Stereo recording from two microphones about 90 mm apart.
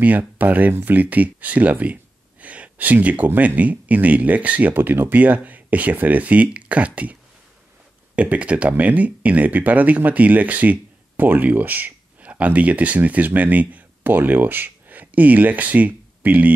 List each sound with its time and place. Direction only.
0.0 s speech: 20° right (ahead or behind)
8.2 s speech: 15° right (ahead or behind)